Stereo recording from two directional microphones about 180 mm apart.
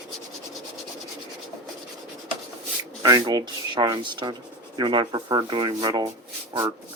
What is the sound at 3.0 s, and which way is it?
Speech, 20° right (ahead or behind).